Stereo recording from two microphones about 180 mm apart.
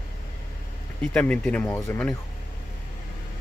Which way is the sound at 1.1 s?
5° left (ahead or behind).